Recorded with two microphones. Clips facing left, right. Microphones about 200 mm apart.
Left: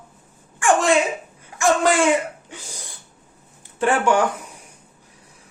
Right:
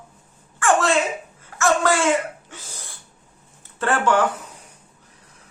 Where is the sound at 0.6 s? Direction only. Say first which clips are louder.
Left 2 dB; 15° left (ahead or behind).